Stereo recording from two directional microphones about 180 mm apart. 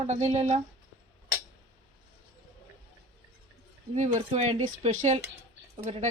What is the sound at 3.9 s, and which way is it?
Speech, 40° right (ahead or behind).